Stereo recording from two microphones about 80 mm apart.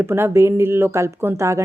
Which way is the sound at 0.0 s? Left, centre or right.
Right.